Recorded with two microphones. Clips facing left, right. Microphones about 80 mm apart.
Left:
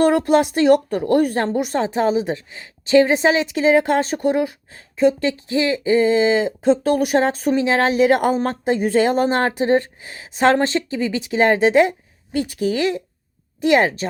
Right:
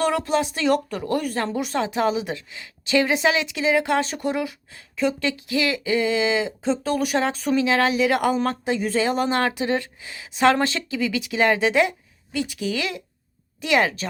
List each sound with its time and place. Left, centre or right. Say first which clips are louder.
0.1 s speech: left 7 dB; left
1.5 s speech: left 4 dB; left